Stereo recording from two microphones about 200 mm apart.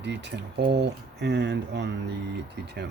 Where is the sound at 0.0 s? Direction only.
60° right (ahead or behind).